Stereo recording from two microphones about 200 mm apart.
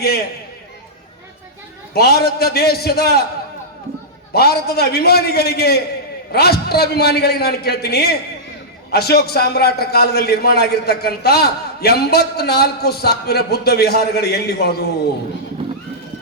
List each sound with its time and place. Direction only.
1.9 s a man's voice: 50° left (ahead or behind)
4.3 s a man's voice: 50° left (ahead or behind)